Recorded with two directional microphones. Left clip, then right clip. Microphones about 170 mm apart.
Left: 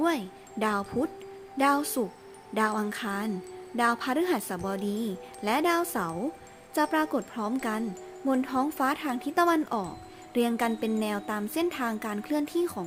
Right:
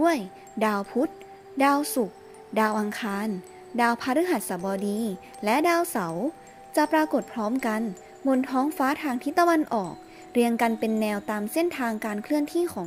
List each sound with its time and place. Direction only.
0.0 s speech: 20° right (ahead or behind)